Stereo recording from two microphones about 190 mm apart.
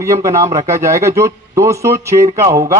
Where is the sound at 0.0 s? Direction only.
15° right (ahead or behind).